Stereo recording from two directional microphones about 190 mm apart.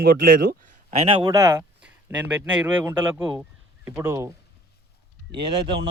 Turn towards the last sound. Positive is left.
turn(degrees=-25)  # may be behind; listen again after turning